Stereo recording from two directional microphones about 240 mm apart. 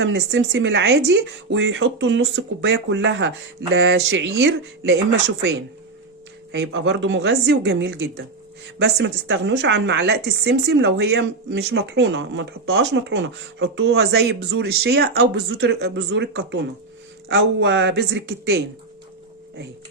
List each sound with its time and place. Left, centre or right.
0.0 s a woman's voice: right
6.5 s a woman's voice: right